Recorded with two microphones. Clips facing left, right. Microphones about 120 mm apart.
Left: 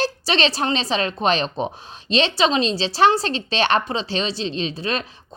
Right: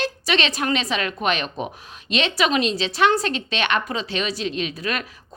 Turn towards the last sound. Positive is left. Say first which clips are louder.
# left 2 dB
turn(degrees=30)  # may be behind; listen again after turning